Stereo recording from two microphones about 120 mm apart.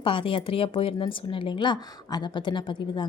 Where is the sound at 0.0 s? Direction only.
45° left (ahead or behind).